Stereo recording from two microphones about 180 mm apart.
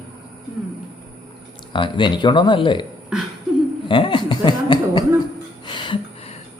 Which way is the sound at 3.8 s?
25° left (ahead or behind).